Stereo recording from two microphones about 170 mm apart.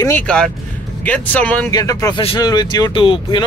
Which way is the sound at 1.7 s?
20° left (ahead or behind).